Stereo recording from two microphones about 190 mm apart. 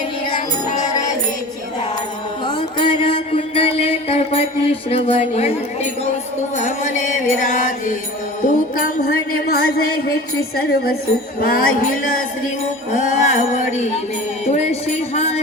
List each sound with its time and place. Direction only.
0.3 s music: 40° left (ahead or behind)
2.5 s mantra: 25° left (ahead or behind)
6.6 s music: 40° left (ahead or behind)
8.4 s a sound: 45° left (ahead or behind)
12.9 s music: 40° left (ahead or behind)